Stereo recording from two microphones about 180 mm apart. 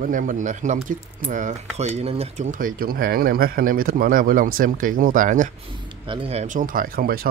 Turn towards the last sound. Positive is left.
turn(degrees=-55)  # may be behind; listen again after turning